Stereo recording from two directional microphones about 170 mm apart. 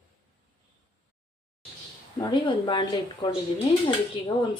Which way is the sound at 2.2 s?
25° left (ahead or behind).